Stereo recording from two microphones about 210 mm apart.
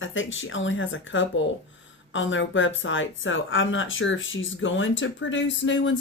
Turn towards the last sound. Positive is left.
turn(degrees=65)  # may be behind; listen again after turning